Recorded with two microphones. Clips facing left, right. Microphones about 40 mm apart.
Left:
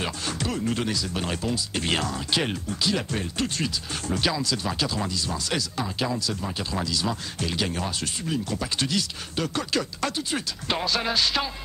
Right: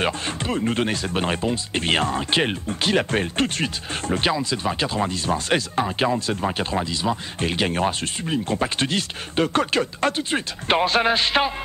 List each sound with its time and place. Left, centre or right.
0.0 s speech: right
6.8 s speech: right
7.4 s speech: right